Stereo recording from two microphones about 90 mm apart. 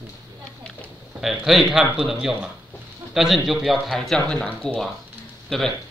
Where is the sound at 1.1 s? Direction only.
5° right (ahead or behind).